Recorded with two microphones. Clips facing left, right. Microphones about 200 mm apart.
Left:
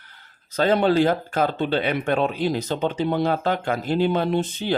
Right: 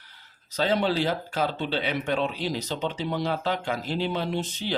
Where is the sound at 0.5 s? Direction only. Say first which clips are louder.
Left 6 dB; 50° left (ahead or behind).